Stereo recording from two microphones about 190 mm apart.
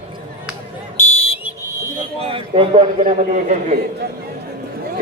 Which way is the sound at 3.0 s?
40° right (ahead or behind).